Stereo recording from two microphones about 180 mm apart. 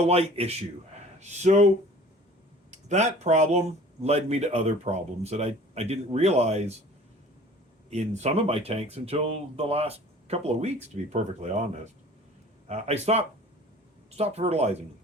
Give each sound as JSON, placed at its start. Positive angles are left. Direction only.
{"t": 0.0, "sound": "speech", "side_deg": -35}
{"t": 2.6, "sound": "speech", "side_deg": -40}
{"t": 7.9, "sound": "speech", "side_deg": -35}
{"t": 12.6, "sound": "speech", "side_deg": -35}